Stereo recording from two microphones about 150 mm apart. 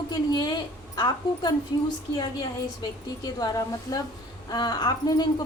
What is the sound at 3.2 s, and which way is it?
A woman's voice, 25° left (ahead or behind).